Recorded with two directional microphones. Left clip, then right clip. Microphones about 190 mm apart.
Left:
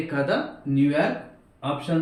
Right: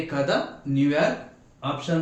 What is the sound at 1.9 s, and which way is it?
Speech, 20° right (ahead or behind).